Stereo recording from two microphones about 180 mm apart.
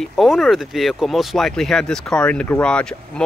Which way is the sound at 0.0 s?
Centre (ahead or behind).